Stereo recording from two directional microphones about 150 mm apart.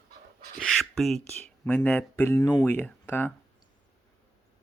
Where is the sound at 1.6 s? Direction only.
10° left (ahead or behind).